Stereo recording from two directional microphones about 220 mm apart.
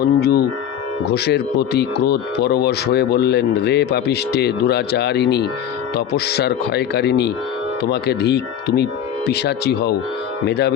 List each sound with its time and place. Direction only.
0.2 s speech: 45° left (ahead or behind)